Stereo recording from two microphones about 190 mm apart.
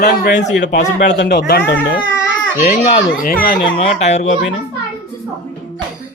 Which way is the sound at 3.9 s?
40° left (ahead or behind).